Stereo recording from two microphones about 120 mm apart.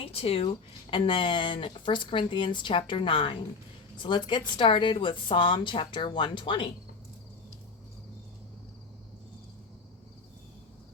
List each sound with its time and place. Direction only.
0.0 s speech: 55° left (ahead or behind)